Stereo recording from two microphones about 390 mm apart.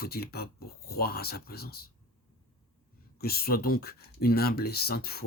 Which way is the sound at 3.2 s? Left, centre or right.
Left.